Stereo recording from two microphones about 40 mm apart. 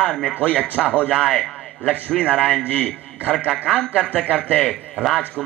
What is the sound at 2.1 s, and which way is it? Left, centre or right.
Speech, left.